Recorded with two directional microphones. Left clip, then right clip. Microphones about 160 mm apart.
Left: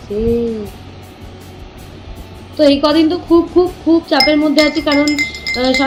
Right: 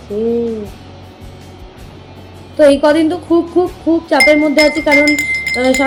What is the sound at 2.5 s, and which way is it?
A woman's voice, 15° right (ahead or behind).